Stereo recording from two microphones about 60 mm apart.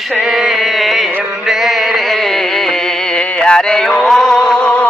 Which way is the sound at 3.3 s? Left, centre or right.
Centre.